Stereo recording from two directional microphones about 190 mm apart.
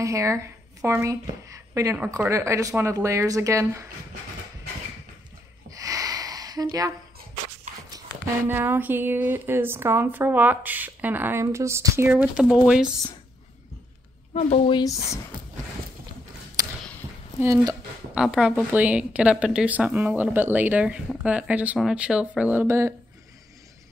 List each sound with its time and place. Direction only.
0.0 s a woman's voice: 15° right (ahead or behind)
5.7 s a sound: 20° right (ahead or behind)
7.7 s a sound: 40° right (ahead or behind)
8.5 s a woman's voice: 10° right (ahead or behind)
14.3 s speech: 30° left (ahead or behind)
17.4 s a woman's voice: 15° right (ahead or behind)
18.1 s a woman's voice: 5° right (ahead or behind)